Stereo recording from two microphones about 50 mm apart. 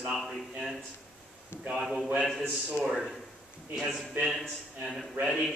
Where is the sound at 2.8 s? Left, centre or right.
Centre.